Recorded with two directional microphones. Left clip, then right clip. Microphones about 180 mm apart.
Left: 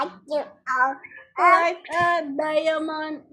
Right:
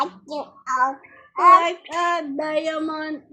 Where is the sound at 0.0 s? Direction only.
10° left (ahead or behind).